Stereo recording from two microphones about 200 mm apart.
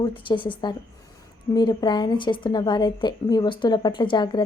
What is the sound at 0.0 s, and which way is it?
A woman's voice, 25° left (ahead or behind).